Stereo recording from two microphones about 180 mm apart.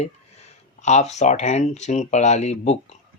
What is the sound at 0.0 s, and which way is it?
Speech, 40° left (ahead or behind).